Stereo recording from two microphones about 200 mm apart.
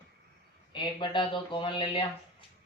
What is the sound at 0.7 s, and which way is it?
Speech, 25° left (ahead or behind).